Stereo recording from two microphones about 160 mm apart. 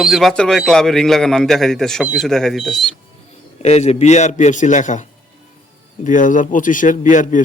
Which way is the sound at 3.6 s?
40° left (ahead or behind).